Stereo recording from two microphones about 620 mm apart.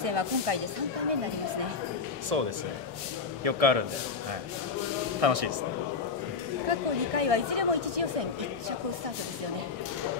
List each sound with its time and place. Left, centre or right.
0.0 s speech: right
2.3 s a man's voice: right
5.2 s speech: right
6.7 s speech: right